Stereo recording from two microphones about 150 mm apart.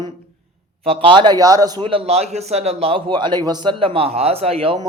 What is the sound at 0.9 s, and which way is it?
A man's voice, 35° right (ahead or behind).